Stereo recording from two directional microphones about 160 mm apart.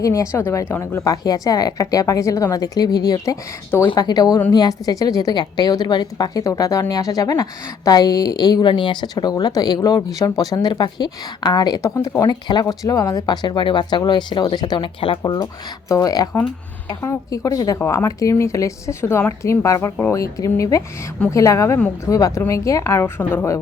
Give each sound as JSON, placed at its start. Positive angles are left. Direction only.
{"t": 0.0, "sound": "a woman's voice", "side_deg": 20}